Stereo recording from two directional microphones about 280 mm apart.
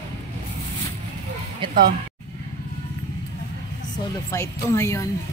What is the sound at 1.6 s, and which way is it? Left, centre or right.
Speech, centre.